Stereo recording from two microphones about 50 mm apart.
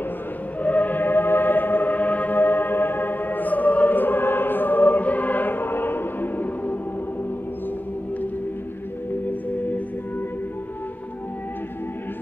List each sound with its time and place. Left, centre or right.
0.6 s music: left